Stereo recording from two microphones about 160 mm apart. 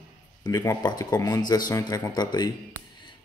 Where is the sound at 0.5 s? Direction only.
20° left (ahead or behind).